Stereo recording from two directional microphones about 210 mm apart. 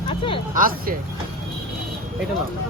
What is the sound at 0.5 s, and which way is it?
Speech, 40° right (ahead or behind).